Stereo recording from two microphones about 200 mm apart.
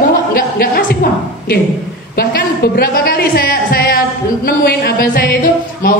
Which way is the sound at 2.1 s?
50° left (ahead or behind).